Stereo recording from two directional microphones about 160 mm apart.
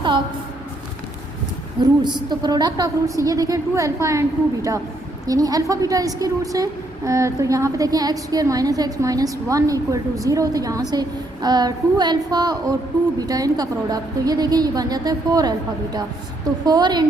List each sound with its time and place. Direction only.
1.8 s a woman's voice: 25° right (ahead or behind)